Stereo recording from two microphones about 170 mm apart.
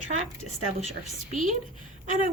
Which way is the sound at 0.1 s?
40° right (ahead or behind).